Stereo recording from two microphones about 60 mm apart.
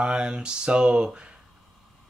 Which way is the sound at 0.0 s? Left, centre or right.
Centre.